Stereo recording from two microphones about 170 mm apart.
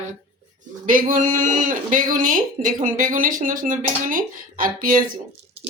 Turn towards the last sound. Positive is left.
turn(degrees=-55)  # may be behind; listen again after turning